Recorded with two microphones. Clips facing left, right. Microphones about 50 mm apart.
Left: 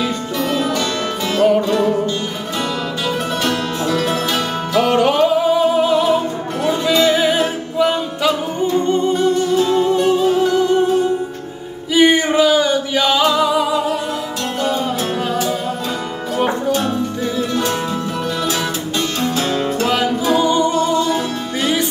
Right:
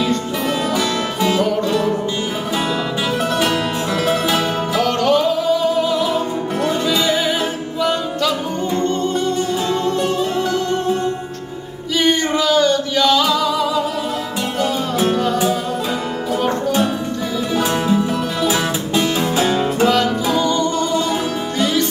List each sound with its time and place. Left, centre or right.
0.0 s music: centre
0.7 s music: centre
1.7 s music: centre
3.3 s music: centre
4.8 s music: centre
6.6 s music: centre
16.3 s music: centre
17.6 s music: centre
19.9 s music: centre